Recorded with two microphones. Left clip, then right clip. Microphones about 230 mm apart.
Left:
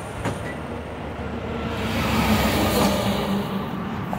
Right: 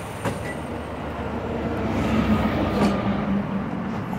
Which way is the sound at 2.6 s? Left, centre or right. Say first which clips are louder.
Left 2 dB; left.